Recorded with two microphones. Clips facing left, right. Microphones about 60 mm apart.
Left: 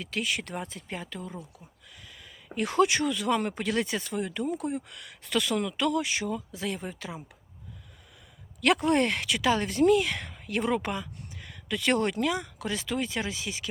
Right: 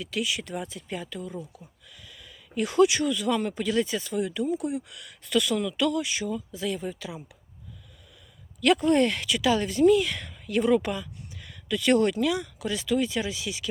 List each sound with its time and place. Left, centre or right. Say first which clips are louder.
0.0 s speech: right 1 dB; left
8.6 s speech: right 3 dB; left